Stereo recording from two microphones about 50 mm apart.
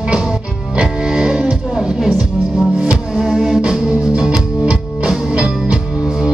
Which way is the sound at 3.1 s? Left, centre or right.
Centre.